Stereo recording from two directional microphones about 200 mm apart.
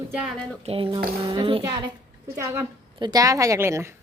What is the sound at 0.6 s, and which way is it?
Speech, 30° right (ahead or behind).